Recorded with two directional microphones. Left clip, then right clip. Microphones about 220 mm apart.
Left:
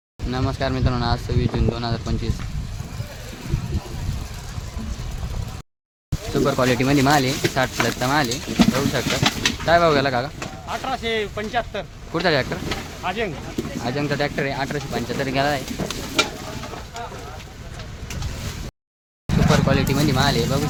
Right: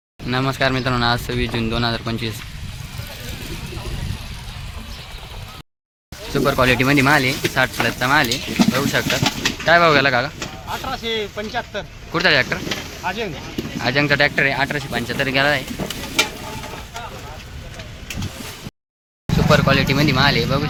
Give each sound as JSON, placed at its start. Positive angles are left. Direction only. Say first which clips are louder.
{"t": 0.3, "sound": "speech", "louder": "right 5 dB", "side_deg": -5}
{"t": 6.3, "sound": "speech", "louder": "right 3 dB", "side_deg": 0}
{"t": 10.7, "sound": "speech", "louder": "even", "side_deg": 25}
{"t": 12.1, "sound": "speech", "louder": "right 4 dB", "side_deg": 5}
{"t": 13.1, "sound": "speech", "louder": "even", "side_deg": 20}
{"t": 13.8, "sound": "speech", "louder": "right 8 dB", "side_deg": 0}
{"t": 19.5, "sound": "speech", "louder": "right 5 dB", "side_deg": 0}